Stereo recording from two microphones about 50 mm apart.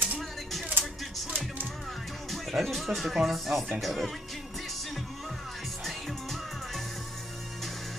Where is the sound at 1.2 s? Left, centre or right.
Right.